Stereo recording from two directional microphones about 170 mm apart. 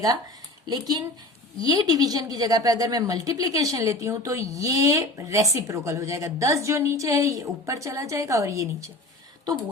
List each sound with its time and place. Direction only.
0.7 s a woman's voice: 25° right (ahead or behind)